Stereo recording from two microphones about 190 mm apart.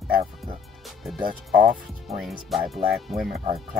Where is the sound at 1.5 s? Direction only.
Centre (ahead or behind).